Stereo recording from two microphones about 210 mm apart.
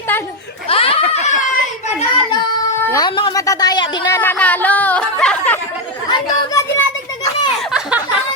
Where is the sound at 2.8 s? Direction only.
15° left (ahead or behind).